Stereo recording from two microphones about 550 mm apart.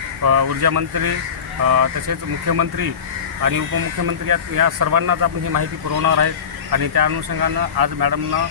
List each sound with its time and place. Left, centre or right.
0.3 s speech: right
4.0 s speech: right